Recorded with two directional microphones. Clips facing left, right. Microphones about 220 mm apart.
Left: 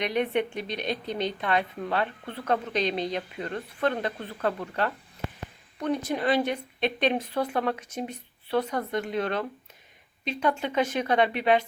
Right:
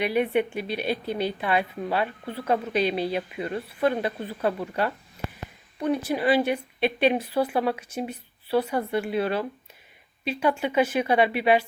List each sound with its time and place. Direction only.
0.0 s a woman's voice: 5° right (ahead or behind)
6.1 s a woman's voice: 5° right (ahead or behind)